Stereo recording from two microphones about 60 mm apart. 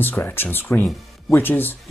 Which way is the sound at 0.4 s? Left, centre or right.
Left.